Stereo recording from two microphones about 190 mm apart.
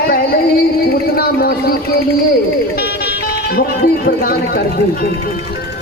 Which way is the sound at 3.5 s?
55° left (ahead or behind).